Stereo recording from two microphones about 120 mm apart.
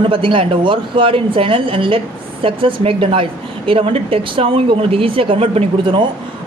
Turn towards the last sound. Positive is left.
turn(degrees=-45)  # may be behind; listen again after turning